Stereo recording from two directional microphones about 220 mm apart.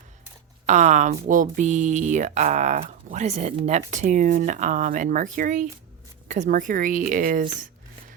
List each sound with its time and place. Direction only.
0.6 s speech: 35° right (ahead or behind)